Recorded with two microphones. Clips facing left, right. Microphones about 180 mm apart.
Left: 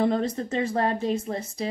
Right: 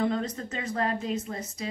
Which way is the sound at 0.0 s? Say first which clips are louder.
Left 4 dB; 30° left (ahead or behind).